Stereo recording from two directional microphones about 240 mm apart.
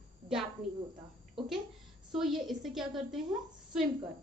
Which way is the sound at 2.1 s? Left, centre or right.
Centre.